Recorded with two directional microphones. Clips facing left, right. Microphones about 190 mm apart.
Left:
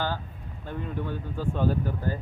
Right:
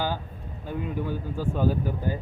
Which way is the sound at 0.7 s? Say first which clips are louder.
Right 3 dB; 10° right (ahead or behind).